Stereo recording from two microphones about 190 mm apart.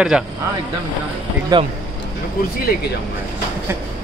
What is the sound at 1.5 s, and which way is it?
Speech, 20° right (ahead or behind).